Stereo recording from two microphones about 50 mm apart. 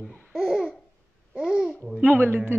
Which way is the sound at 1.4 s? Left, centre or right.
Centre.